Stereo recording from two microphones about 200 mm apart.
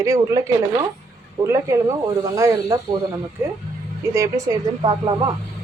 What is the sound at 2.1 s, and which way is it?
Speech, 15° right (ahead or behind).